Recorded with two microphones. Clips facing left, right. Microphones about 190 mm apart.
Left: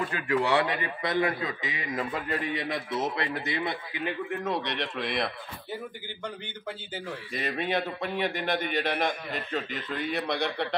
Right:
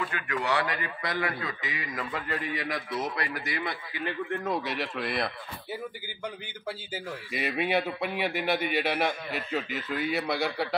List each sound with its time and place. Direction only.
0.1 s a man's voice: 30° left (ahead or behind)
4.5 s a man's voice: 5° right (ahead or behind)